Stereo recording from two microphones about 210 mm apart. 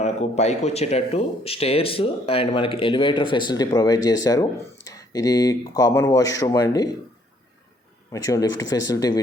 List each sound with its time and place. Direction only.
0.0 s speech: 30° left (ahead or behind)
8.1 s speech: 15° left (ahead or behind)